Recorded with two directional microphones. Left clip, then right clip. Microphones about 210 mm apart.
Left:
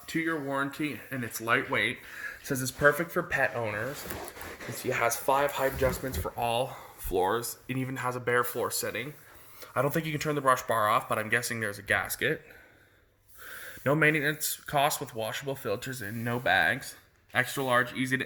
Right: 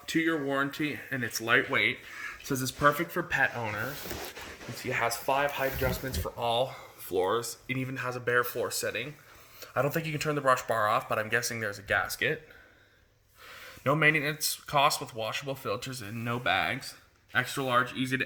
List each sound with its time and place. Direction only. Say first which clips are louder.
0.2 s speech: right 2 dB; 15° left (ahead or behind)
4.8 s speech: left 2 dB; 25° left (ahead or behind)
13.8 s speech: even; 30° left (ahead or behind)